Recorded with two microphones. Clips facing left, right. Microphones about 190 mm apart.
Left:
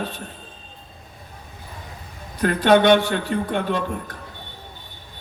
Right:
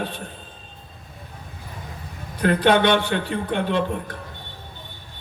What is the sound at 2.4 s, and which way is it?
A man's voice, 45° left (ahead or behind).